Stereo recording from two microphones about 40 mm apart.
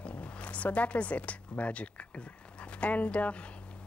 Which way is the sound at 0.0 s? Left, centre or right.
Left.